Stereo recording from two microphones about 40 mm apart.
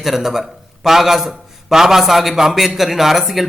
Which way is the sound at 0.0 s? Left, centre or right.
Centre.